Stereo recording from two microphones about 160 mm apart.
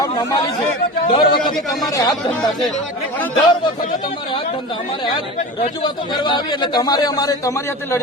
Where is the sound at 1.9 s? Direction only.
20° left (ahead or behind).